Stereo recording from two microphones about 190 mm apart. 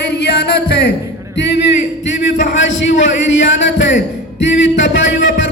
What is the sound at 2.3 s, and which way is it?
A man's voice, 80° left.